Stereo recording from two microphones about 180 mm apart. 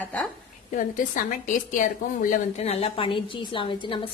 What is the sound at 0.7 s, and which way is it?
A woman's voice, 50° left (ahead or behind).